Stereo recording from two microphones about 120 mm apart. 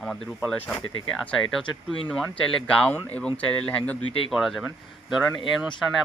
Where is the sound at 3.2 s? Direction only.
10° left (ahead or behind).